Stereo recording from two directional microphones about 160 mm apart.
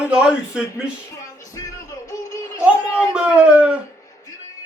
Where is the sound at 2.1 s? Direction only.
20° left (ahead or behind).